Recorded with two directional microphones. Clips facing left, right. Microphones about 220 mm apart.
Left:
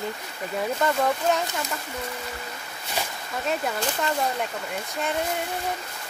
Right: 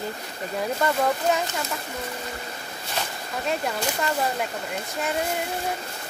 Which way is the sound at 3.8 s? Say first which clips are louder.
Even; 5° right (ahead or behind).